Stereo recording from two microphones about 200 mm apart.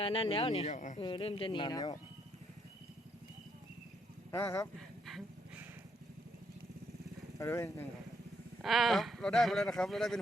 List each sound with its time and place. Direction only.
0.0 s speech: 25° left (ahead or behind)
0.9 s speech: 25° left (ahead or behind)
4.3 s speech: 15° left (ahead or behind)
5.0 s a sound: centre (ahead or behind)
7.3 s speech: 15° left (ahead or behind)
8.6 s speech: centre (ahead or behind)